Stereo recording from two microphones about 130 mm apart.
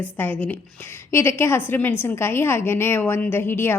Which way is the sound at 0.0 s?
15° left (ahead or behind).